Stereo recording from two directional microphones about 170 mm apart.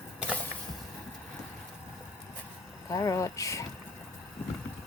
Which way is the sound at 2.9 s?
20° left (ahead or behind).